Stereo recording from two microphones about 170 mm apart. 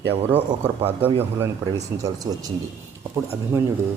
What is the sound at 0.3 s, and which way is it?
A man's voice, 10° right (ahead or behind).